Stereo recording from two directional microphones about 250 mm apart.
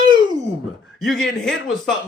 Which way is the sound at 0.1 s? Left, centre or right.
Centre.